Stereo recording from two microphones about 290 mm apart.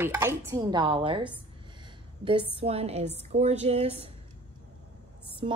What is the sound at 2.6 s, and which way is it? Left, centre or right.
A woman's voice, right.